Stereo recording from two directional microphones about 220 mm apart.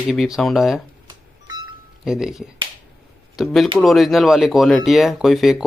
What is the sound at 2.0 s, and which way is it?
Speech, centre (ahead or behind).